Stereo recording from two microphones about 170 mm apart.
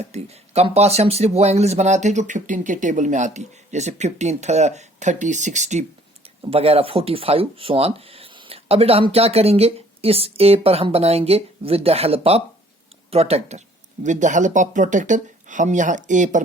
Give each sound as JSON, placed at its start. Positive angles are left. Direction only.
{"t": 0.0, "sound": "speech", "side_deg": -40}